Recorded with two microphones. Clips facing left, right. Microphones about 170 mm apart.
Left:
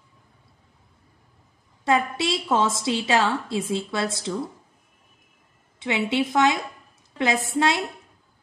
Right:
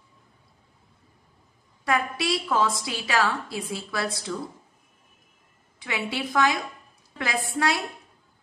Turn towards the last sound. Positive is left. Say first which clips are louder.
# left 4 dB
turn(degrees=20)  # may be behind; listen again after turning